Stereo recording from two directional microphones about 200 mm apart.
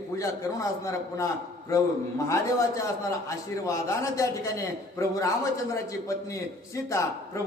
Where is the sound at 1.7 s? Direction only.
15° left (ahead or behind).